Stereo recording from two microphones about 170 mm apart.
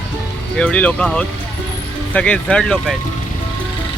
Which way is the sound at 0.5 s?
5° left (ahead or behind).